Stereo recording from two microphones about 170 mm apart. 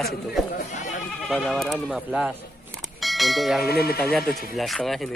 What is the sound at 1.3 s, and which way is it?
Speech, centre (ahead or behind).